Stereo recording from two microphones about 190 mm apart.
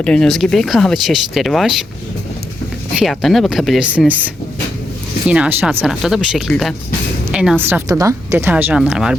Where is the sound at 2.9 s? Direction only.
Centre (ahead or behind).